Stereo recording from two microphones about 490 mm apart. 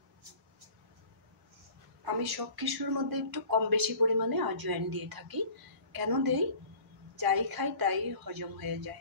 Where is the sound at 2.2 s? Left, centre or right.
Right.